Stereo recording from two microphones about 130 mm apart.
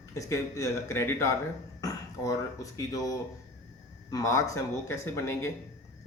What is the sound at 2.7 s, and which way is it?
A man's voice, 25° left (ahead or behind).